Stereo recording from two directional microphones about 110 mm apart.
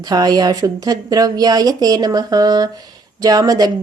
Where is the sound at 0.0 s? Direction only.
35° right (ahead or behind).